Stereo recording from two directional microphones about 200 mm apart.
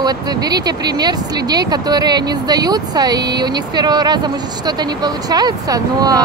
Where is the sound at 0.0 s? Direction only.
20° right (ahead or behind).